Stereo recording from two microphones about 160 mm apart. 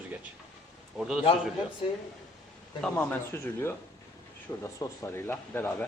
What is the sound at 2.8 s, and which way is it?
A man's voice, 10° left (ahead or behind).